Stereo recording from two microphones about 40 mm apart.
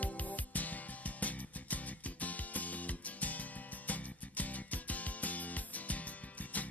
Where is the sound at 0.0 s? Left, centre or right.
Left.